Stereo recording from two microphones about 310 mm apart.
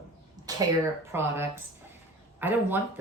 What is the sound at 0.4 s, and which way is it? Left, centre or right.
Speech, centre.